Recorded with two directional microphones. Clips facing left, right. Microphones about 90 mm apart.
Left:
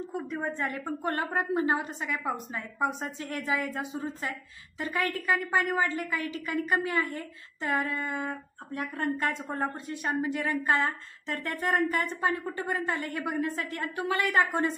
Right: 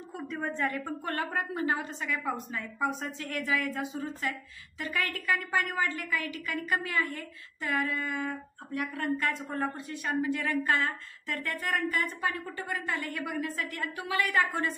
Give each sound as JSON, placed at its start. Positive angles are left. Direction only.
{"t": 0.3, "sound": "a woman's voice", "side_deg": 15}